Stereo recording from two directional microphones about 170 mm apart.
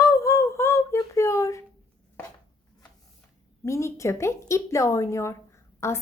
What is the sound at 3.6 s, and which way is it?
A woman's voice, 15° left (ahead or behind).